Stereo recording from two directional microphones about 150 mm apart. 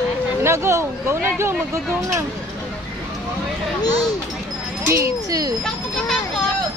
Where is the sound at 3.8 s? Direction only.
25° left (ahead or behind).